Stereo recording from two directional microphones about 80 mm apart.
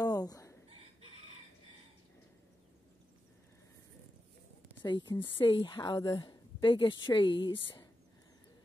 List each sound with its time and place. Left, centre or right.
0.0 s a sound: left
4.8 s a woman's voice: left
5.9 s speech: left
6.1 s a woman's voice: left